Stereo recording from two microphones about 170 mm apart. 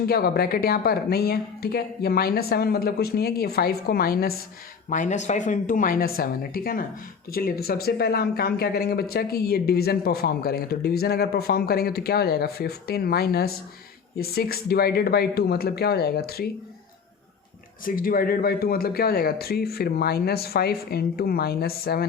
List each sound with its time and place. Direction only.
0.0 s speech: 65° left (ahead or behind)
4.9 s a woman's voice: 45° left (ahead or behind); by 16.5 s 65° left (ahead or behind)
17.8 s speech: 55° left (ahead or behind)